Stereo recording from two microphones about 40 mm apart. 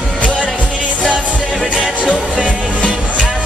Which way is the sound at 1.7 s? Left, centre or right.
Right.